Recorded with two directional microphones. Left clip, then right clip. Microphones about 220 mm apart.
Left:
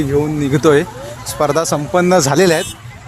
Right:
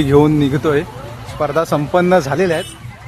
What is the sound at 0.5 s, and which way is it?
Speech, 15° left (ahead or behind).